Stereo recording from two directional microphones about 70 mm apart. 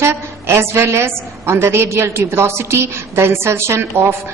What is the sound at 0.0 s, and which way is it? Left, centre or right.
A woman's voice, right.